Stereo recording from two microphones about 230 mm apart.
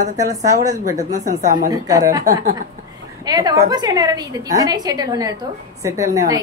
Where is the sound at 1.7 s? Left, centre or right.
Centre.